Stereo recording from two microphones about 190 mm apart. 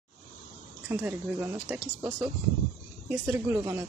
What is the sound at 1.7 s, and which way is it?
Speech, 5° right (ahead or behind).